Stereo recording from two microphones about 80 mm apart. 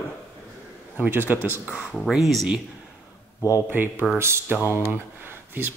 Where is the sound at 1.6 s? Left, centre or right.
Centre.